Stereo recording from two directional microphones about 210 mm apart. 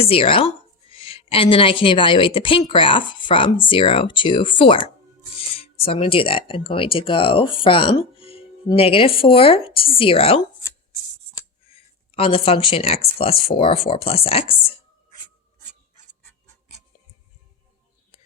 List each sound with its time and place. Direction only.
0.0 s a woman's voice: 25° left (ahead or behind)
11.7 s a woman's voice: 25° left (ahead or behind)